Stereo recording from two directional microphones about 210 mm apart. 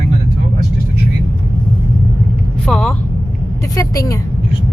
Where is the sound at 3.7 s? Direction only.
15° left (ahead or behind).